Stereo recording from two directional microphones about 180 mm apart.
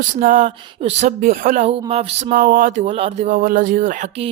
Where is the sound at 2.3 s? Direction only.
50° right (ahead or behind).